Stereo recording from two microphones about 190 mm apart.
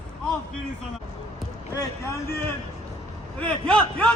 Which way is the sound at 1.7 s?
15° left (ahead or behind).